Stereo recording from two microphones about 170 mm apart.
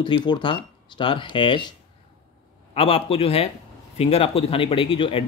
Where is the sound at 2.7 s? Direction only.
35° left (ahead or behind).